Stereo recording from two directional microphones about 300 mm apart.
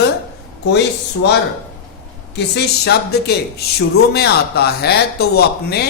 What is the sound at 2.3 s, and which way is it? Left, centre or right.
Speech, left.